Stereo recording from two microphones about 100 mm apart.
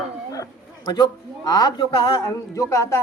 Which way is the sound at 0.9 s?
40° left (ahead or behind).